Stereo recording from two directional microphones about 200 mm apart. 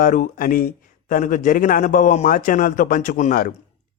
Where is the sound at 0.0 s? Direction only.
40° left (ahead or behind).